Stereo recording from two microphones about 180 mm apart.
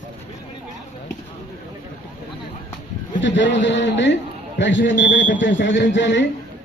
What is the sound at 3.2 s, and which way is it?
A man's voice, 90° left.